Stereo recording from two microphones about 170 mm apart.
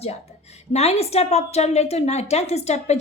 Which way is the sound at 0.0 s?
40° left (ahead or behind).